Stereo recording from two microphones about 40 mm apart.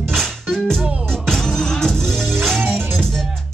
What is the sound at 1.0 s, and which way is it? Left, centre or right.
Music, centre.